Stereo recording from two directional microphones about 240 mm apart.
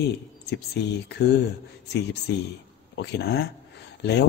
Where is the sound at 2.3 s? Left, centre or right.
Left.